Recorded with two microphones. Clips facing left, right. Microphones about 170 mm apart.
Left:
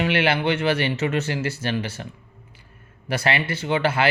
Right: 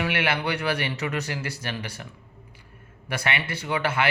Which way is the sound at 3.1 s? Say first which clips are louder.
Left 5 dB; 30° left (ahead or behind).